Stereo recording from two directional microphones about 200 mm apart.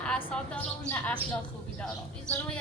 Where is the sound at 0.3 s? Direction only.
5° left (ahead or behind).